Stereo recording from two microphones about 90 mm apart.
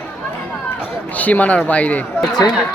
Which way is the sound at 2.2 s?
45° left (ahead or behind).